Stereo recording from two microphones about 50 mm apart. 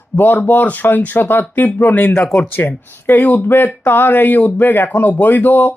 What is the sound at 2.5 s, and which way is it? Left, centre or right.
Speech, left.